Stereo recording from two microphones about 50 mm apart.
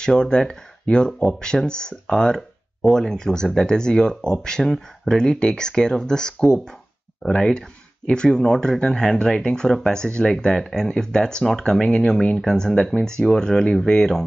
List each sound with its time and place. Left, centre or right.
0.0 s speech: centre